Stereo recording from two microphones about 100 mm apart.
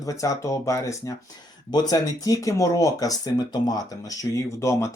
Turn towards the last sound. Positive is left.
turn(degrees=30)  # may be behind; listen again after turning